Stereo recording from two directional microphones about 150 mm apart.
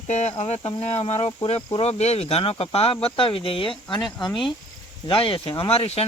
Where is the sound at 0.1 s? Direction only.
45° left (ahead or behind).